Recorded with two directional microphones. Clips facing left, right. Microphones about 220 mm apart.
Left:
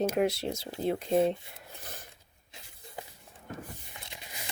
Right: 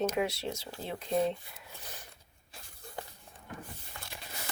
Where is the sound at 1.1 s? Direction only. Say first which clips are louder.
Left 2 dB; 25° left (ahead or behind).